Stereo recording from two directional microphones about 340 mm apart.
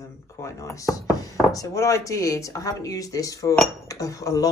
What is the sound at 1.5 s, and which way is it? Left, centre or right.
Speech, centre.